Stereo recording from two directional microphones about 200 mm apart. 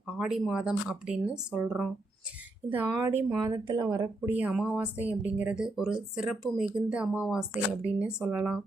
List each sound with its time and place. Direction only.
0.2 s speech: centre (ahead or behind); by 4.1 s 20° right (ahead or behind)
4.3 s speech: 5° right (ahead or behind)